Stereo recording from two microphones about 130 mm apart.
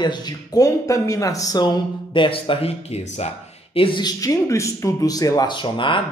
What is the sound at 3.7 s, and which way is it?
Speech, 40° left (ahead or behind).